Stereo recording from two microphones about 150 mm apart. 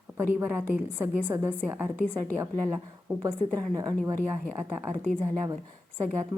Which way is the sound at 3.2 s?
30° right (ahead or behind).